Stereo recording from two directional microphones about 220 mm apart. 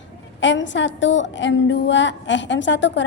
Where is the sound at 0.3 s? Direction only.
55° left (ahead or behind).